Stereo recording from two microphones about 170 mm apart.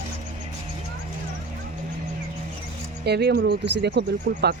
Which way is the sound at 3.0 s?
75° right (ahead or behind).